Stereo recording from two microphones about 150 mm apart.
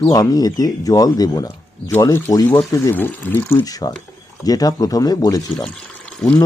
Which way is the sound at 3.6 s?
25° left (ahead or behind).